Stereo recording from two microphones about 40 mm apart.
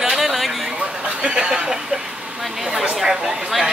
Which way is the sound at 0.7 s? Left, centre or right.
Right.